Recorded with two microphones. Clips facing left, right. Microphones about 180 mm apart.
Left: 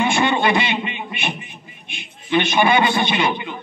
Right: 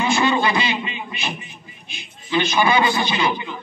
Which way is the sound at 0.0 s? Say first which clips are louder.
Left 1 dB; 25° left (ahead or behind).